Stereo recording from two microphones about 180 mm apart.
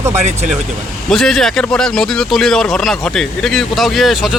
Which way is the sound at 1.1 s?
Centre (ahead or behind).